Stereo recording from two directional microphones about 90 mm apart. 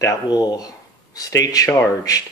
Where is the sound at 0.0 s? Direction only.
45° left (ahead or behind).